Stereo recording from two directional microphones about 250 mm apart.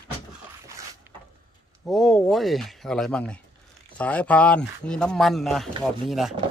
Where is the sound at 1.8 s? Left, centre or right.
Centre.